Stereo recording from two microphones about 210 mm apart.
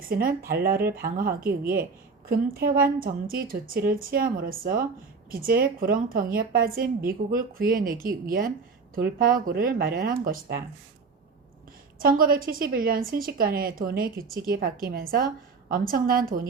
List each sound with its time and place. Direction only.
0.1 s speech: 45° right (ahead or behind)
11.9 s speech: 45° right (ahead or behind)